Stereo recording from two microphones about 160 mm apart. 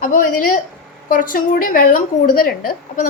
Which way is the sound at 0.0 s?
55° left (ahead or behind).